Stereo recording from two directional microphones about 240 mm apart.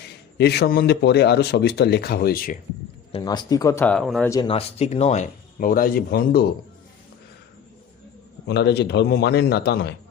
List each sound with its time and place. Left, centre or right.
0.3 s speech: left
3.1 s speech: centre
4.3 s speech: centre; by 6.4 s left
8.4 s speech: left